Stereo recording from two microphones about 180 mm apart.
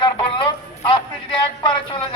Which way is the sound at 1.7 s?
30° left (ahead or behind).